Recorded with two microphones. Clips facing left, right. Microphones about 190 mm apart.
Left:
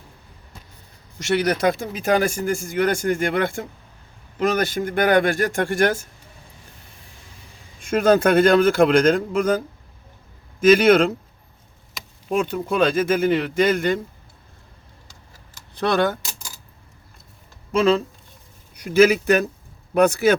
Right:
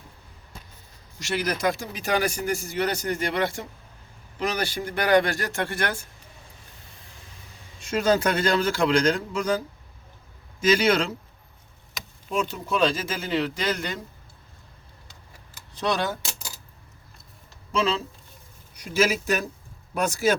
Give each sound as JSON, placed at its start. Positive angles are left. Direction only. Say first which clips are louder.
{"t": 1.2, "sound": "speech", "louder": "left 6 dB", "side_deg": 65}
{"t": 7.8, "sound": "speech", "louder": "left 5 dB", "side_deg": 55}
{"t": 12.0, "sound": "a sound", "louder": "left 1 dB", "side_deg": 0}
{"t": 12.3, "sound": "speech", "louder": "left 5 dB", "side_deg": 55}
{"t": 15.7, "sound": "speech", "louder": "left 6 dB", "side_deg": 60}
{"t": 17.7, "sound": "speech", "louder": "left 7 dB", "side_deg": 55}